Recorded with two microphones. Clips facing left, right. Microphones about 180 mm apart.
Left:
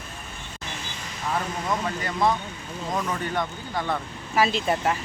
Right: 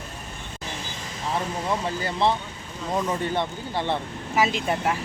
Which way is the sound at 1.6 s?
30° right (ahead or behind).